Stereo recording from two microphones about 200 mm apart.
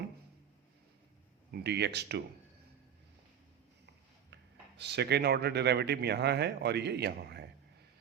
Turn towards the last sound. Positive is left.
turn(degrees=-55)  # may be behind; listen again after turning